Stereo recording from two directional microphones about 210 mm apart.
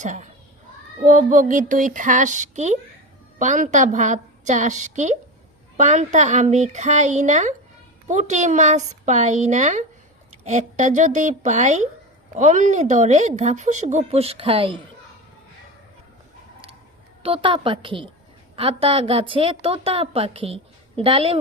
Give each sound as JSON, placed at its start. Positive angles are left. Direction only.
{"t": 0.0, "sound": "speech", "side_deg": -35}
{"t": 17.2, "sound": "a woman's voice", "side_deg": -25}